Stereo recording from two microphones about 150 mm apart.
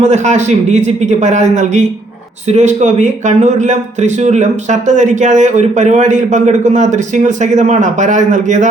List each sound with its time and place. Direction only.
0.0 s speech: 50° right (ahead or behind)